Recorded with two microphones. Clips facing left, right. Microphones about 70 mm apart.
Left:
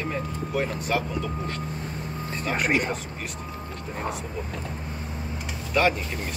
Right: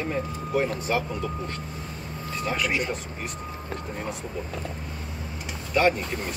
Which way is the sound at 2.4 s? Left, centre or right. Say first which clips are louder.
Left 2 dB; left.